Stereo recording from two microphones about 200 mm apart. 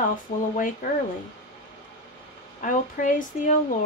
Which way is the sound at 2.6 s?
40° left (ahead or behind).